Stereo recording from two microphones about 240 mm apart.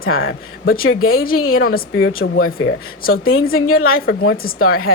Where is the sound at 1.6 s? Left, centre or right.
Left.